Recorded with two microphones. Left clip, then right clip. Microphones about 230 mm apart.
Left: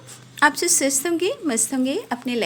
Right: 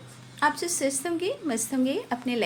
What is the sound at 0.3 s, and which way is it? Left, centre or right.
A woman's voice, left.